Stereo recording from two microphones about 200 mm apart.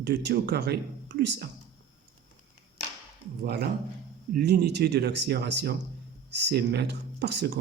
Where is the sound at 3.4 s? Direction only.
50° right (ahead or behind).